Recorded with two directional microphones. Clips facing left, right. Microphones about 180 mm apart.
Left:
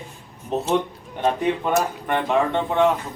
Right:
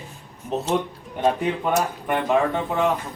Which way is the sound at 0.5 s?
Centre (ahead or behind).